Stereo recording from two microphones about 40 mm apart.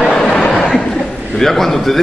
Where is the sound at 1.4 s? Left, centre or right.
Centre.